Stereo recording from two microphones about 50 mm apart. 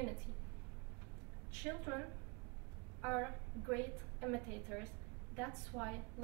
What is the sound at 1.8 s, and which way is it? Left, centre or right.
Speech, centre.